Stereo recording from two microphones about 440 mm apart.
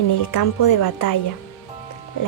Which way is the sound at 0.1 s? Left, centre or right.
Left.